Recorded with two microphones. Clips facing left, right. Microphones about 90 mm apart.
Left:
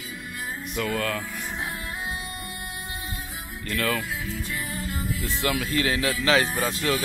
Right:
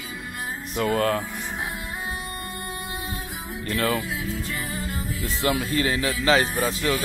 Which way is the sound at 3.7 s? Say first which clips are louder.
Right 2 dB; 30° right (ahead or behind).